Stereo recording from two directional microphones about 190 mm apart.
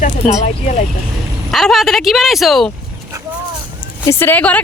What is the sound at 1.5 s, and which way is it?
Speech, centre (ahead or behind).